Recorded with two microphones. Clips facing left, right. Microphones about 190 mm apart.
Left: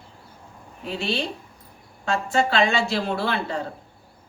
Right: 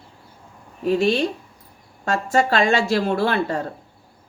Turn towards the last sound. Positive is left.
turn(degrees=-45)  # may be behind; listen again after turning